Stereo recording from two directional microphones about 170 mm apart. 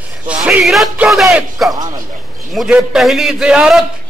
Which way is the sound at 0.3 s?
5° right (ahead or behind).